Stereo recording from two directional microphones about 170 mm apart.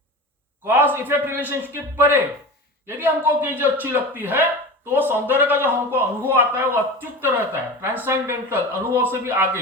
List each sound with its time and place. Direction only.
0.6 s a man's voice: 10° right (ahead or behind)